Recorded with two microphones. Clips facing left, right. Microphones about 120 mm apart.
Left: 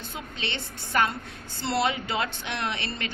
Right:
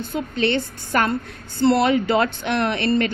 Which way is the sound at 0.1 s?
50° right (ahead or behind).